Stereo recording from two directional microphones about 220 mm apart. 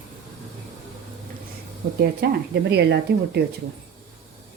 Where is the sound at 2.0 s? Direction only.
45° right (ahead or behind).